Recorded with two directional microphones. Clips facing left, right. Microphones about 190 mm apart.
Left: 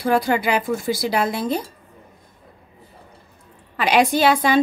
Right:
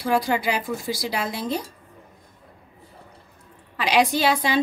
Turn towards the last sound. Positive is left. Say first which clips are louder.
# left 5 dB
turn(degrees=50)  # may be behind; listen again after turning